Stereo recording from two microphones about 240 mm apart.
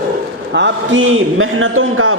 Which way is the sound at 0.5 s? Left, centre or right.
Right.